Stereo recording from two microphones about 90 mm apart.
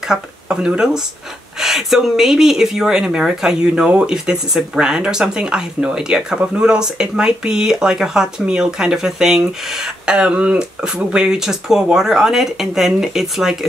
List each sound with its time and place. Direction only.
0.0 s speech: 5° right (ahead or behind)